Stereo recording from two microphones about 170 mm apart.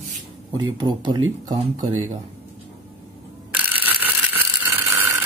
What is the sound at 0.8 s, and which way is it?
Speech, 25° right (ahead or behind).